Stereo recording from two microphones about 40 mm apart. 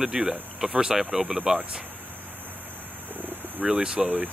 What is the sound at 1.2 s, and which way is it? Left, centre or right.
Speech, right.